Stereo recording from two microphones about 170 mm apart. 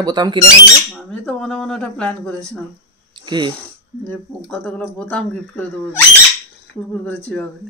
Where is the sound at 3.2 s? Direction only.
25° right (ahead or behind).